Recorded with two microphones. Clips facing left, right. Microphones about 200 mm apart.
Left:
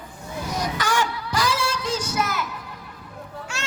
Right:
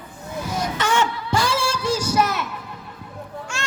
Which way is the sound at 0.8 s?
25° right (ahead or behind).